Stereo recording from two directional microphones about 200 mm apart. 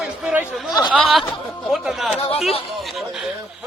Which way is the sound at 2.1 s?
30° left (ahead or behind).